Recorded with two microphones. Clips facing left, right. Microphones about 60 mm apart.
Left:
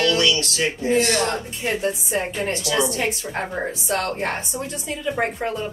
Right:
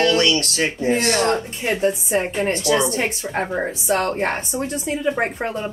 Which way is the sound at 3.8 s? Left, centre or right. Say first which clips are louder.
Right 4 dB; right.